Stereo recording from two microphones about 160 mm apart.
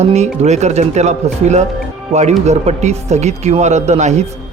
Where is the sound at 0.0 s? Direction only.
45° right (ahead or behind).